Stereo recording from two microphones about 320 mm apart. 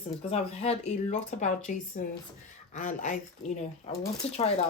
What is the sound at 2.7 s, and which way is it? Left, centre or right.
Speech, left.